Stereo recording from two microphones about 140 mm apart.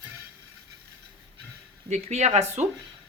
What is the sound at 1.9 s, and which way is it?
Speech, 55° right (ahead or behind).